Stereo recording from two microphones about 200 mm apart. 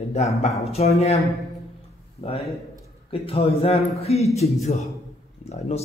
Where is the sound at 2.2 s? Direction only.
30° left (ahead or behind).